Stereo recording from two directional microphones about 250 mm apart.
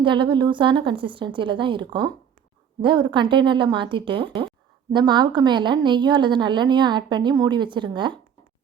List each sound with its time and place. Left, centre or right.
0.0 s a woman's voice: centre